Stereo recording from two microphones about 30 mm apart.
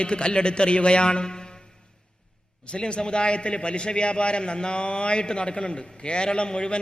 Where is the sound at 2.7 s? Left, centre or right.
Left.